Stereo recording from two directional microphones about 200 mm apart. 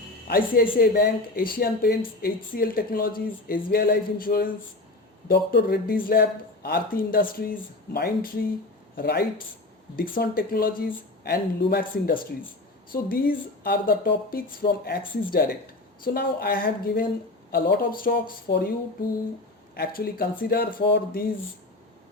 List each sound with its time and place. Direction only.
0.3 s speech: 45° left (ahead or behind)
19.7 s speech: 50° left (ahead or behind)